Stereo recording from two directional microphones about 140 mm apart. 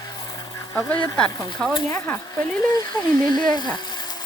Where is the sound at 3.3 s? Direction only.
30° left (ahead or behind).